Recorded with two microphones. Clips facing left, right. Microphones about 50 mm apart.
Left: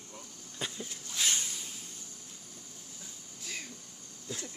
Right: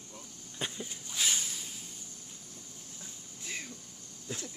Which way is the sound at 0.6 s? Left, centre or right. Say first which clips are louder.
Right 1 dB; centre.